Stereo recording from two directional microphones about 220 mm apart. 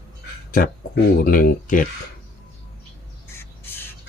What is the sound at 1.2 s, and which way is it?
Speech, 40° left (ahead or behind).